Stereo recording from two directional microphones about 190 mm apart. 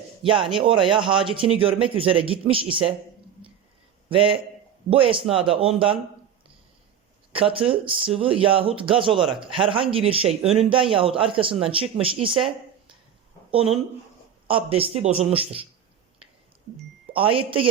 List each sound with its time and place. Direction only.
0.2 s speech: 25° right (ahead or behind)
4.1 s speech: 30° right (ahead or behind)
7.3 s speech: 30° right (ahead or behind)
14.4 s speech: 30° right (ahead or behind)
17.2 s speech: 30° right (ahead or behind)